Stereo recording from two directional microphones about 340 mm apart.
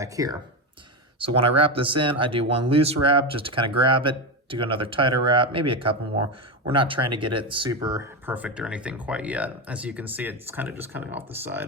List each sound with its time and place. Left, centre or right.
0.0 s speech: centre
1.4 s speech: centre